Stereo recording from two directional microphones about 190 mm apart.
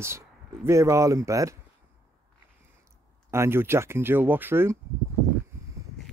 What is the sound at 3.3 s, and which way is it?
Speech, 15° right (ahead or behind).